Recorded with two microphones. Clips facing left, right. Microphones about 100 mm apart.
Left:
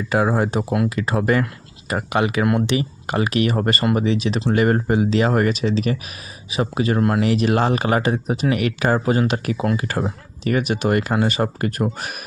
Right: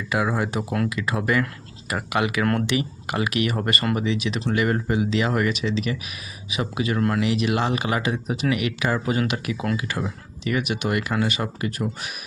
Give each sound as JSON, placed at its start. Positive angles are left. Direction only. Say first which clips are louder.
{"t": 0.1, "sound": "speech", "louder": "left 5 dB", "side_deg": 35}
{"t": 2.4, "sound": "speech", "louder": "left 4 dB", "side_deg": 10}
{"t": 2.6, "sound": "speech", "louder": "left 3 dB", "side_deg": 30}